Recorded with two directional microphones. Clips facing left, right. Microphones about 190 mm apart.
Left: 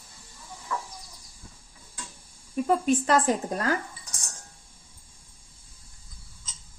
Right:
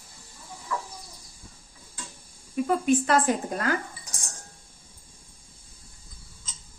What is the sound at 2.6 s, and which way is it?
Speech, 35° left (ahead or behind).